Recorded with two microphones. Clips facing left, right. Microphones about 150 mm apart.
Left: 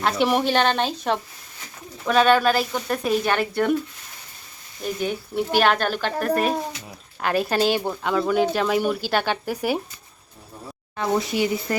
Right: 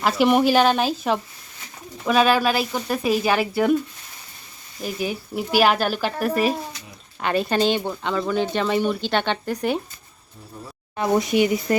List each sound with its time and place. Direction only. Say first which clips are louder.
0.0 s speech: right 3 dB; centre (ahead or behind)
4.8 s speech: left 1 dB; 5° right (ahead or behind)
10.9 s speech: right 3 dB; 15° right (ahead or behind)